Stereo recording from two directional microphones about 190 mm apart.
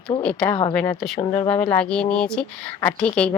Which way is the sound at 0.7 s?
5° left (ahead or behind).